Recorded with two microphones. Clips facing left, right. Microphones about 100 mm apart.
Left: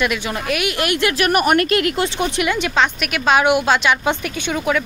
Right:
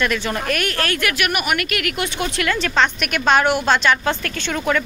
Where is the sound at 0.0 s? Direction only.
10° left (ahead or behind).